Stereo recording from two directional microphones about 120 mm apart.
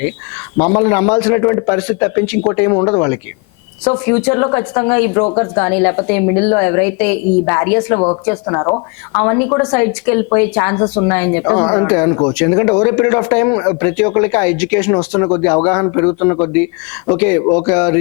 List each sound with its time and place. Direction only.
0.6 s speech: 20° left (ahead or behind)